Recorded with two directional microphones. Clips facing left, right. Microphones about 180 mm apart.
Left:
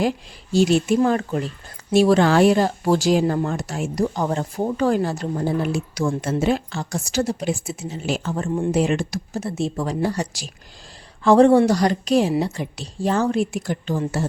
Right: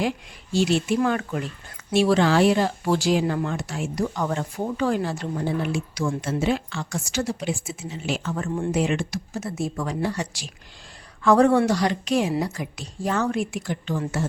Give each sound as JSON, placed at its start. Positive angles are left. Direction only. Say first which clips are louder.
{"t": 0.5, "sound": "speech", "louder": "left 4 dB", "side_deg": 45}
{"t": 0.9, "sound": "speech", "louder": "left 4 dB", "side_deg": 30}
{"t": 8.4, "sound": "speech", "louder": "left 4 dB", "side_deg": 15}
{"t": 8.7, "sound": "speech", "louder": "left 3 dB", "side_deg": 40}